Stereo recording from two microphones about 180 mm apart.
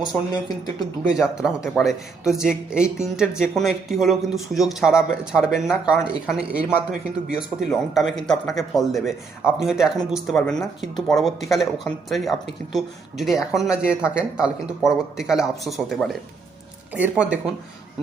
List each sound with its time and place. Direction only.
1.1 s speech: 5° right (ahead or behind)